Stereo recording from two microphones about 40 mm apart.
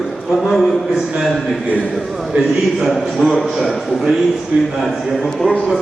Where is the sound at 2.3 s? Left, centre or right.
Right.